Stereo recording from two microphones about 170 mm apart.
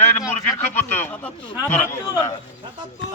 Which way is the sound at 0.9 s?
15° left (ahead or behind).